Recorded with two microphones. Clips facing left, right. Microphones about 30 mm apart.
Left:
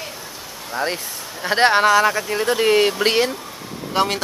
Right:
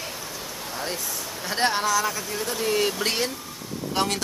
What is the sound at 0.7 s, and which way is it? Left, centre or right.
Speech, left.